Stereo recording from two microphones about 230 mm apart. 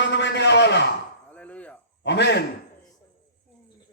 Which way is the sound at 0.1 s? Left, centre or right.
Left.